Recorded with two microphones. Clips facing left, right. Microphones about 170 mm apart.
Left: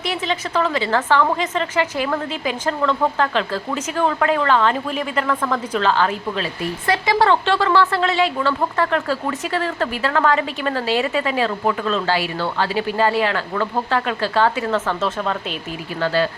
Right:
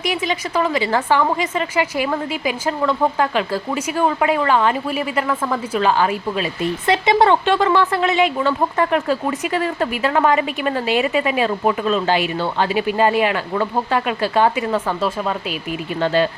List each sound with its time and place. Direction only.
0.0 s speech: 10° right (ahead or behind)
6.6 s speech: 20° right (ahead or behind)
16.0 s speech: 20° right (ahead or behind)